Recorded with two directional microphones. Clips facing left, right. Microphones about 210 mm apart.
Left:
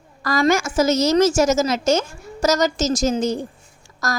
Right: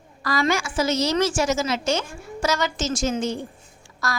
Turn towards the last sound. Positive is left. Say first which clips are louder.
# left 3 dB
turn(degrees=40)  # may be behind; listen again after turning